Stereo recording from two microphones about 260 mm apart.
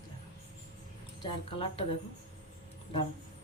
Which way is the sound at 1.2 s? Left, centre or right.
Left.